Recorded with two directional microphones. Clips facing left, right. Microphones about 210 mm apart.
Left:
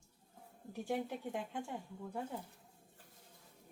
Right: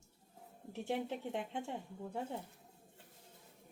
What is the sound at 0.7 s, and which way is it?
Speech, 25° right (ahead or behind).